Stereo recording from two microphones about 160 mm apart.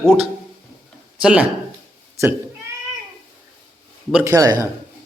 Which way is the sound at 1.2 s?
5° right (ahead or behind).